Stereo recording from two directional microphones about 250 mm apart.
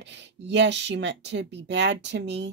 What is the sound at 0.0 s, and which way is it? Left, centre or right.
Speech, right.